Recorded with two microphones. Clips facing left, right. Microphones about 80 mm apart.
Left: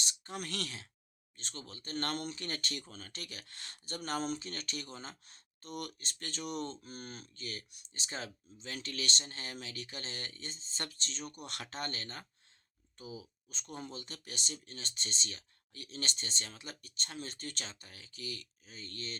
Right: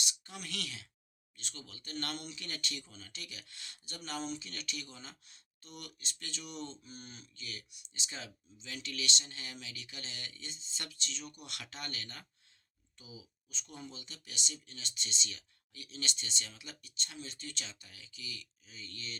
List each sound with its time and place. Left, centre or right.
0.0 s speech: left